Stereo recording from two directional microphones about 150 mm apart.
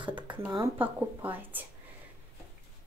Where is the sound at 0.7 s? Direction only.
10° right (ahead or behind).